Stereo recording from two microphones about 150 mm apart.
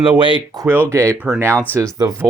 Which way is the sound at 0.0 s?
35° right (ahead or behind).